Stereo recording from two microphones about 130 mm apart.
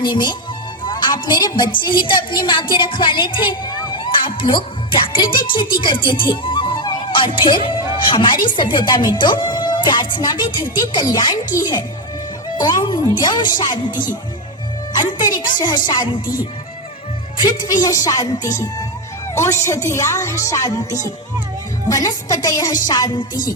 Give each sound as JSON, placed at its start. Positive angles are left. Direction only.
{"t": 0.0, "sound": "a woman's voice", "side_deg": 35}
{"t": 12.5, "sound": "a woman's voice", "side_deg": 35}
{"t": 15.2, "sound": "a woman's voice", "side_deg": 35}
{"t": 17.4, "sound": "a woman's voice", "side_deg": 35}